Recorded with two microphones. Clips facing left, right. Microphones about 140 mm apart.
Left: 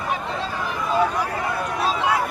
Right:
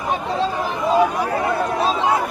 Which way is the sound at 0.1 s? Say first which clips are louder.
Right 7 dB; 30° right (ahead or behind).